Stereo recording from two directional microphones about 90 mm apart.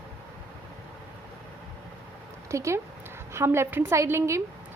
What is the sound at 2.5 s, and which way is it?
A woman's voice, 35° right (ahead or behind).